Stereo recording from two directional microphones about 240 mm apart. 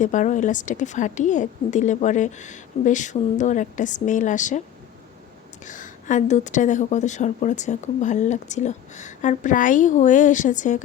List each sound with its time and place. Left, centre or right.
0.0 s a woman's voice: left
5.6 s a woman's voice: left